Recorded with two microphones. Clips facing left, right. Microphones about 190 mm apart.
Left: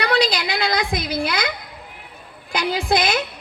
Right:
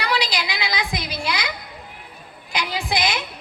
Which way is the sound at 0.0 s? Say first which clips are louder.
Left 5 dB; 55° left (ahead or behind).